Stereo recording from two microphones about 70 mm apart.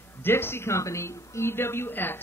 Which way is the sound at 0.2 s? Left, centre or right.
Left.